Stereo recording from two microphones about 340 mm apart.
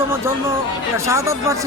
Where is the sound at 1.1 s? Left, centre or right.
Centre.